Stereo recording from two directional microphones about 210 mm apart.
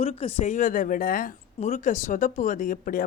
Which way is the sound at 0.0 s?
30° left (ahead or behind).